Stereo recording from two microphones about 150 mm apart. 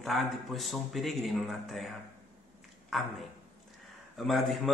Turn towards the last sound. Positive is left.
turn(degrees=0)  # may be behind; listen again after turning